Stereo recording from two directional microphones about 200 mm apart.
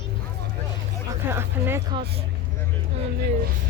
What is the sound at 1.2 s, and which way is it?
Speech, 10° right (ahead or behind).